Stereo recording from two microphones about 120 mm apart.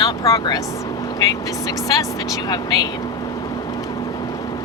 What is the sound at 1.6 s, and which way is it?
Speech, 30° left (ahead or behind).